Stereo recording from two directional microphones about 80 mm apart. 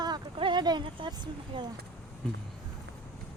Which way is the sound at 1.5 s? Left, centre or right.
Right.